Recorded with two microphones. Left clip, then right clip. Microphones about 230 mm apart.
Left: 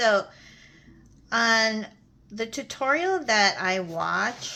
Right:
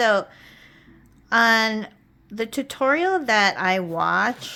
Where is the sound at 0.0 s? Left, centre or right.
Right.